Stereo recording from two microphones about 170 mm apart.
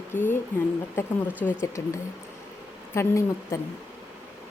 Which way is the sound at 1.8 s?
15° left (ahead or behind).